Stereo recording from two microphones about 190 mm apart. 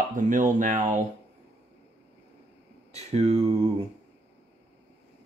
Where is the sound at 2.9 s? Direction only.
35° right (ahead or behind).